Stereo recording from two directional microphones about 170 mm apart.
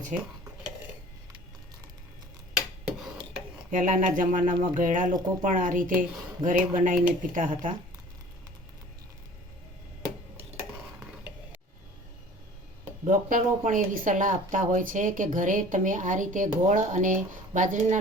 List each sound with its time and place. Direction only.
0.1 s speech: 50° right (ahead or behind)
3.3 s speech: 50° right (ahead or behind)
13.1 s speech: 50° right (ahead or behind)